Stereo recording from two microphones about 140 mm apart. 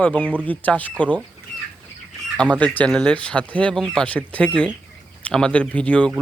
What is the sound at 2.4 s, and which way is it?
Speech, 10° left (ahead or behind).